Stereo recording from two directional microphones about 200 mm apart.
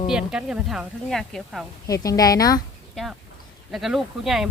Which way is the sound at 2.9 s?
Centre (ahead or behind).